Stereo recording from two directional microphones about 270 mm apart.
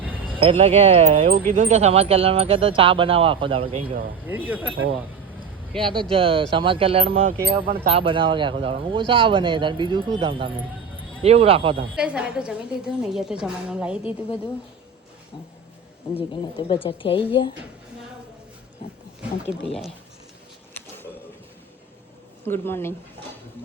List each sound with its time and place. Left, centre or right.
0.0 s basketball bounce: centre
0.3 s speech: centre
4.3 s speech: centre
4.7 s speech: right
5.8 s speech: centre
11.9 s a woman's voice: centre
16.1 s a woman's voice: centre
22.4 s speech: centre